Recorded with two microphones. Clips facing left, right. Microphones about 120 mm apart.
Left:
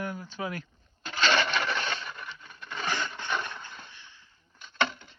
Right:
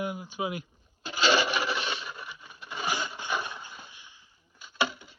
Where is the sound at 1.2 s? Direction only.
10° right (ahead or behind).